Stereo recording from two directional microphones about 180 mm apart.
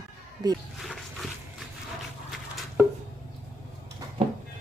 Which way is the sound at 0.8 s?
Centre (ahead or behind).